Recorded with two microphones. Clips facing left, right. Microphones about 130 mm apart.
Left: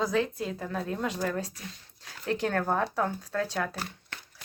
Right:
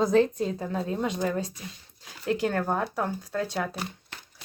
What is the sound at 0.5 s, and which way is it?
Speech, 20° right (ahead or behind).